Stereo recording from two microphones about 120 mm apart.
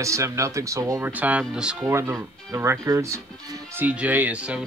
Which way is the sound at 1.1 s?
10° right (ahead or behind).